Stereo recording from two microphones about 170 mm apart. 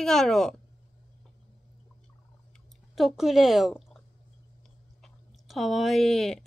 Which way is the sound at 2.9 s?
Centre (ahead or behind).